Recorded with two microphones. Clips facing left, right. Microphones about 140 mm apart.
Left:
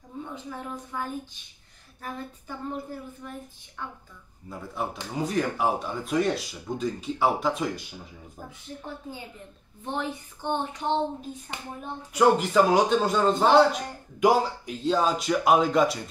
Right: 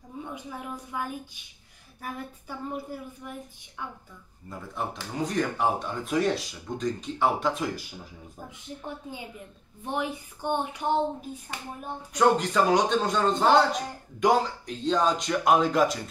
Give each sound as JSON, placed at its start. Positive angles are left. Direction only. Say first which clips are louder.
{"t": 0.2, "sound": "speech", "louder": "left 1 dB", "side_deg": -10}
{"t": 4.5, "sound": "speech", "louder": "left 1 dB", "side_deg": 0}
{"t": 8.5, "sound": "speech", "louder": "right 1 dB", "side_deg": -15}
{"t": 12.1, "sound": "speech", "louder": "left 2 dB", "side_deg": 5}